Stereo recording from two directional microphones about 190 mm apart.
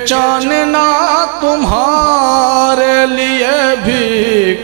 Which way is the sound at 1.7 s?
35° right (ahead or behind).